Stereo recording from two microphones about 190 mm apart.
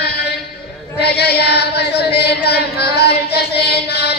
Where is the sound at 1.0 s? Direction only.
60° left (ahead or behind).